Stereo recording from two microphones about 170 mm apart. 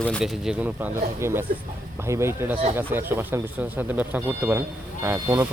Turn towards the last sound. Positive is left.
turn(degrees=-15)  # may be behind; listen again after turning